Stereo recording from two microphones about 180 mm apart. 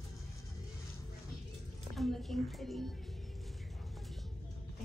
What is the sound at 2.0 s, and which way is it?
Speech, centre (ahead or behind).